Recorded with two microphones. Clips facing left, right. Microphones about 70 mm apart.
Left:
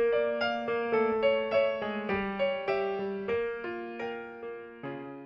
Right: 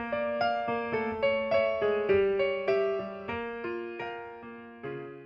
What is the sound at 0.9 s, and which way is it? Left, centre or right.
Music, left.